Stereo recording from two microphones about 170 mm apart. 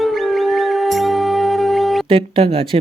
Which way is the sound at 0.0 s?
Centre (ahead or behind).